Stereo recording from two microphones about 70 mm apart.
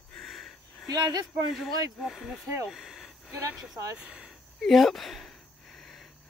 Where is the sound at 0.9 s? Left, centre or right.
Right.